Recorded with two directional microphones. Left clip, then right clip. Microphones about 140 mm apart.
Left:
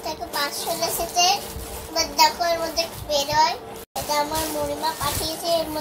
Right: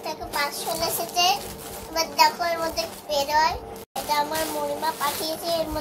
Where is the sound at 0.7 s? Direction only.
Centre (ahead or behind).